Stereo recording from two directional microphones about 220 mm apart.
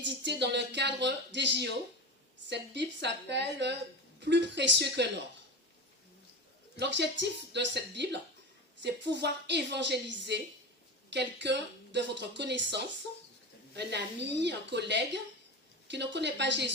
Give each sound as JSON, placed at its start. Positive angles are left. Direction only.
{"t": 0.0, "sound": "speech", "side_deg": -50}
{"t": 6.7, "sound": "speech", "side_deg": -50}